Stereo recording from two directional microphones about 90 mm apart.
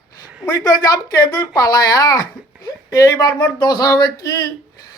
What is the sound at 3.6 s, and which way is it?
Speech, 45° left (ahead or behind).